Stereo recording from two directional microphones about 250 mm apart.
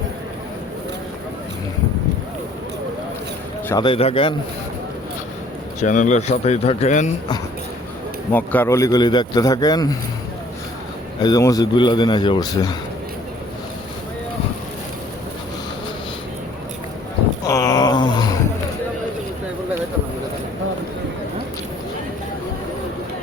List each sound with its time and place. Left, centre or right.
3.7 s speech: centre
5.8 s speech: left
8.3 s a man's voice: centre
11.2 s a man's voice: centre
17.4 s wail: centre